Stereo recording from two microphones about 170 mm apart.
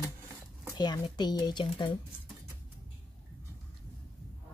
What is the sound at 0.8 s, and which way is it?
Speech, 25° left (ahead or behind).